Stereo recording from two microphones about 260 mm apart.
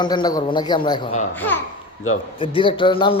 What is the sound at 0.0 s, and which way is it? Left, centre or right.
A child's voice, centre.